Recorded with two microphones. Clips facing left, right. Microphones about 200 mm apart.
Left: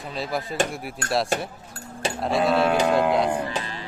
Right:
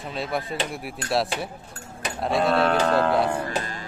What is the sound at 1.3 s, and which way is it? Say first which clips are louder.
Speech: left 4 dB; 45° left (ahead or behind).